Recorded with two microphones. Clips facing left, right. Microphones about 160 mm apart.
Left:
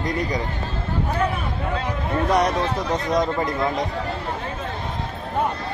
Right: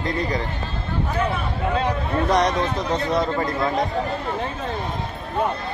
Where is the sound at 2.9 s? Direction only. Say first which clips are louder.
Even; 15° left (ahead or behind).